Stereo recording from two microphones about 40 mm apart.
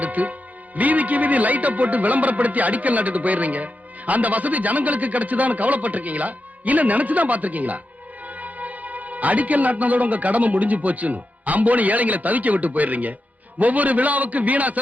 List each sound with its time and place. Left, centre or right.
0.0 s music: right
0.8 s a man's voice: right